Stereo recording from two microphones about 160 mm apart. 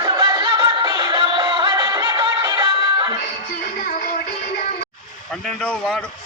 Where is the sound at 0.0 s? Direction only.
25° right (ahead or behind).